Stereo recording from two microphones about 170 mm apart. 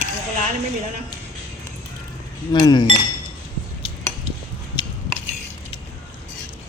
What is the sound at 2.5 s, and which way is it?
Speech, 25° left (ahead or behind).